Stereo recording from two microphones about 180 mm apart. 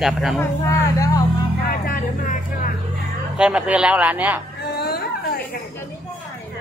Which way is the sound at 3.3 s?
5° right (ahead or behind).